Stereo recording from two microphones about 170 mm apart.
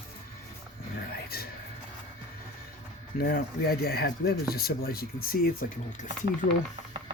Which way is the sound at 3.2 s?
60° left (ahead or behind).